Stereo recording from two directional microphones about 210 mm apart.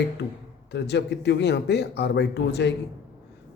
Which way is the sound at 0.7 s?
55° left (ahead or behind).